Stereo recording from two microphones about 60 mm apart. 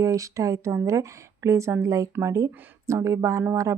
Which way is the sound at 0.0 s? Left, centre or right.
Right.